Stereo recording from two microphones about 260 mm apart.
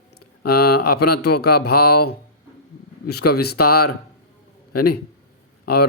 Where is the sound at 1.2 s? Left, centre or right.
Left.